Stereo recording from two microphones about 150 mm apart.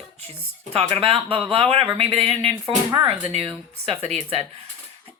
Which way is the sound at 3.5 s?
40° right (ahead or behind).